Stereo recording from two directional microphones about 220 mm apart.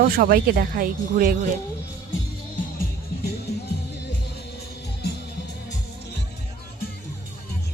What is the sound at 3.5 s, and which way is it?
Music, 45° left (ahead or behind).